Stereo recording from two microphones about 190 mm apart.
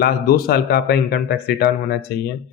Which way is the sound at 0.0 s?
55° left (ahead or behind).